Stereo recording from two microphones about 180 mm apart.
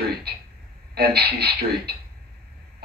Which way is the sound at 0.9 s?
60° right (ahead or behind).